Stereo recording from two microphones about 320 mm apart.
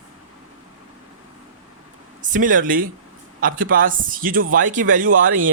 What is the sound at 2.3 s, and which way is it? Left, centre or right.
A man's voice, right.